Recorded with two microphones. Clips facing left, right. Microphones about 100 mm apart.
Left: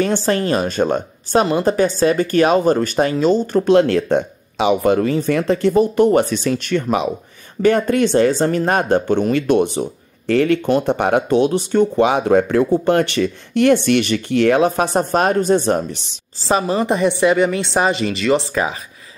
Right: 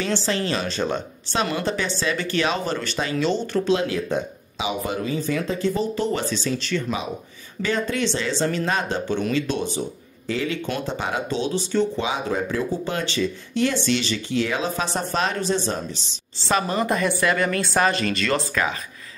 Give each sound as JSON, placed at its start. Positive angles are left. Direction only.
{"t": 0.0, "sound": "speech", "side_deg": 50}
{"t": 16.6, "sound": "speech", "side_deg": 25}